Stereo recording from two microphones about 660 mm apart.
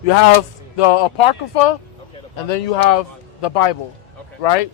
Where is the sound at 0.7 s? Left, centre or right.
Left.